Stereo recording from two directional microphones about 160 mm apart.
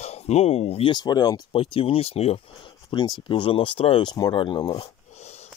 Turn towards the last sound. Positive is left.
turn(degrees=45)  # may be behind; listen again after turning